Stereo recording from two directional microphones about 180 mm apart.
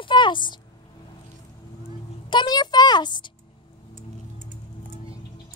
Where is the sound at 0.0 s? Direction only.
25° left (ahead or behind).